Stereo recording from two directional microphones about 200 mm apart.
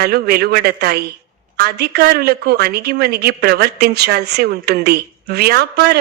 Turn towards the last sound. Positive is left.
turn(degrees=-50)  # may be behind; listen again after turning